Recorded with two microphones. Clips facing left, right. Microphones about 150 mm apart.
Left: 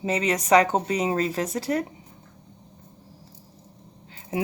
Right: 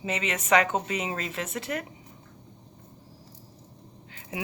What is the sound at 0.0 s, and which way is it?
Speech, 35° left (ahead or behind).